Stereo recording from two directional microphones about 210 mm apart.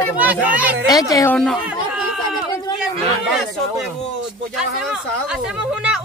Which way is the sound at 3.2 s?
Centre (ahead or behind).